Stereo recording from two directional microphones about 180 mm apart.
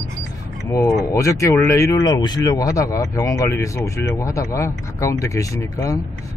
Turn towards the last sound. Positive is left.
turn(degrees=15)  # may be behind; listen again after turning